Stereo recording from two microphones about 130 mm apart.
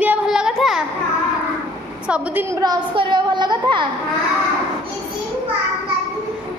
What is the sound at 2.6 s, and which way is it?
Speech, 35° right (ahead or behind).